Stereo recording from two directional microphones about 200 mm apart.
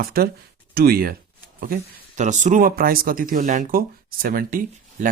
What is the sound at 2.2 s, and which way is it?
Speech, 35° right (ahead or behind).